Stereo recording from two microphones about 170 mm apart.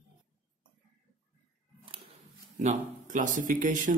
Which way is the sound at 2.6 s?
45° right (ahead or behind).